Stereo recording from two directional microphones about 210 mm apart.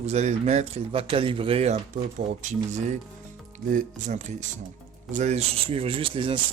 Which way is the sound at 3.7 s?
35° right (ahead or behind).